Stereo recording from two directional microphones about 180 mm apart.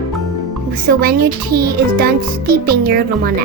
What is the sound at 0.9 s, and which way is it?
Speech, 55° right (ahead or behind).